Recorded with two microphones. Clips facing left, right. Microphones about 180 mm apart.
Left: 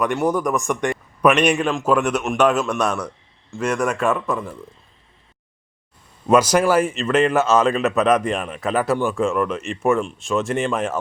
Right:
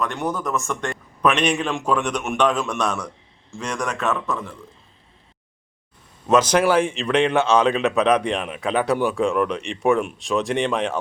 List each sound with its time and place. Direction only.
0.0 s a man's voice: 10° left (ahead or behind)
6.3 s a man's voice: 10° left (ahead or behind)